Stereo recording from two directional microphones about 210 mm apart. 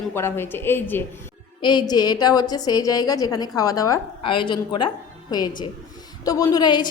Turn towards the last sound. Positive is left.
turn(degrees=20)  # may be behind; listen again after turning